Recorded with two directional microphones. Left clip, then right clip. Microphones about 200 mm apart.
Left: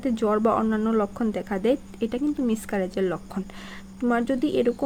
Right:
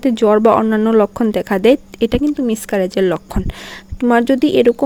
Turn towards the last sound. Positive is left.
turn(degrees=-40)  # may be behind; listen again after turning